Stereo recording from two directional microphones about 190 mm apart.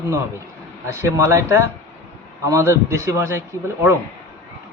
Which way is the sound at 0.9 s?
15° right (ahead or behind).